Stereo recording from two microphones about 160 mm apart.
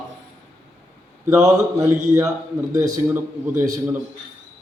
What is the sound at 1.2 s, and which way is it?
A man's voice, 20° right (ahead or behind).